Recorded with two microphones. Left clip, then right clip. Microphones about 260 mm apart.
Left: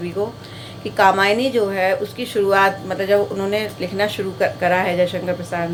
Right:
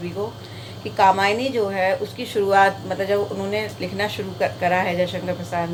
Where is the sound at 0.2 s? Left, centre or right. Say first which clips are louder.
Left 6 dB; centre.